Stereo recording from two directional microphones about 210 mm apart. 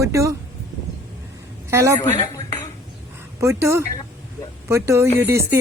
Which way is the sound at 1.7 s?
15° right (ahead or behind).